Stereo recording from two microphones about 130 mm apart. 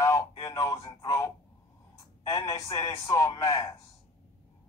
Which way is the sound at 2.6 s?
40° left (ahead or behind).